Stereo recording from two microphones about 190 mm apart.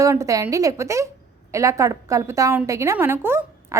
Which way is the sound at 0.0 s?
15° right (ahead or behind).